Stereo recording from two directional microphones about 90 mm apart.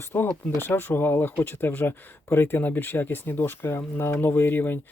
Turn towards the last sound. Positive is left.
turn(degrees=20)  # may be behind; listen again after turning